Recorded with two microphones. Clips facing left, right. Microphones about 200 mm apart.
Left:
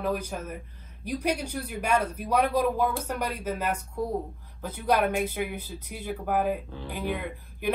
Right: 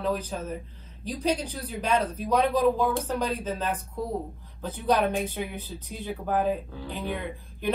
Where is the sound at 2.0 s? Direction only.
30° right (ahead or behind).